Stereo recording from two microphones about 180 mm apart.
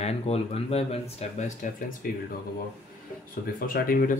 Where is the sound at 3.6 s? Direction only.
55° left (ahead or behind).